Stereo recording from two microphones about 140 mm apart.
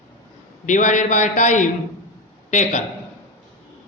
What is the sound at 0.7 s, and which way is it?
A man's voice, 65° left (ahead or behind).